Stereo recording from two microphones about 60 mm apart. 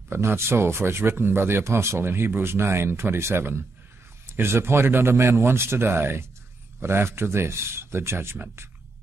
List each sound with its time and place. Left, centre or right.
0.1 s speech: right